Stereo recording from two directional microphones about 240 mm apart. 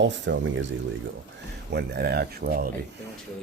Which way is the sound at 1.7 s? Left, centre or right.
Right.